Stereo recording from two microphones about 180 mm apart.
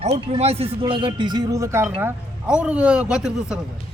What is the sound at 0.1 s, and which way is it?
A man's voice, 35° right (ahead or behind).